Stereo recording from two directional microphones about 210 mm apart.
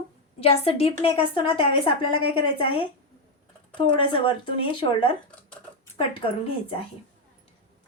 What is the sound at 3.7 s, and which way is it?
A woman's voice, 20° left (ahead or behind).